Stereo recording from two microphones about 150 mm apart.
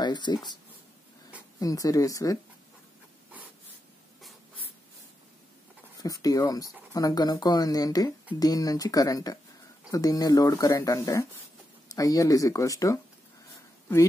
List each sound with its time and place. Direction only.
0.0 s speech: 30° left (ahead or behind)
1.6 s speech: 25° left (ahead or behind)
6.0 s speech: 25° left (ahead or behind)